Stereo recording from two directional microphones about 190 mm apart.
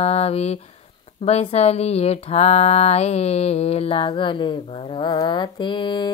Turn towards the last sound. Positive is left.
turn(degrees=25)  # may be behind; listen again after turning